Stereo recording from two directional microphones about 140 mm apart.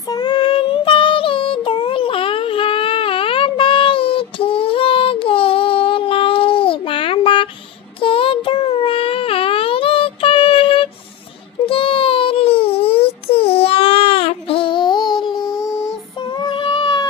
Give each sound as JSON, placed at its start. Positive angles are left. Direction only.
{"t": 0.1, "sound": "child singing", "side_deg": 30}
{"t": 8.0, "sound": "a sound", "side_deg": 40}
{"t": 11.6, "sound": "baby cry", "side_deg": 40}
{"t": 16.4, "sound": "child singing", "side_deg": 35}